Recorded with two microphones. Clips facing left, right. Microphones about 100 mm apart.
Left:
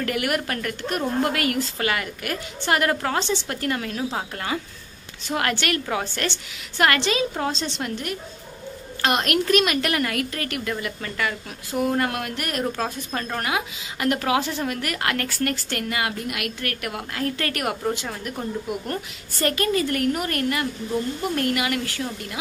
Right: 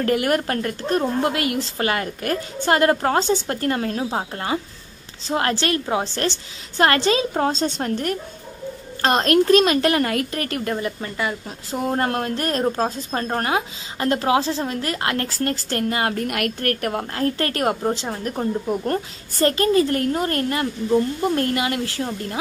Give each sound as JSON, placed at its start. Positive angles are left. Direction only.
{"t": 0.0, "sound": "a woman's voice", "side_deg": -35}